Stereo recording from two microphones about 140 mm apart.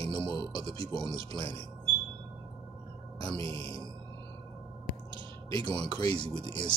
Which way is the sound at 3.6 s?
20° left (ahead or behind).